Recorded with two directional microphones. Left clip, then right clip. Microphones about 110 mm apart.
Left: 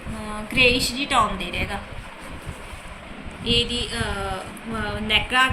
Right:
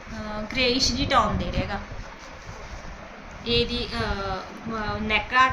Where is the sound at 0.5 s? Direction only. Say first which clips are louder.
Left 5 dB; 70° right (ahead or behind).